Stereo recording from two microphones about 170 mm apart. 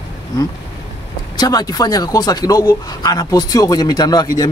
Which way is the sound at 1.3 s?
25° left (ahead or behind).